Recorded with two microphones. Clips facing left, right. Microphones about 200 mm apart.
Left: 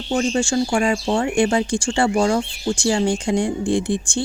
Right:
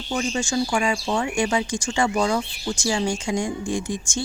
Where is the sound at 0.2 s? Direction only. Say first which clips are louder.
Left 4 dB; 35° left (ahead or behind).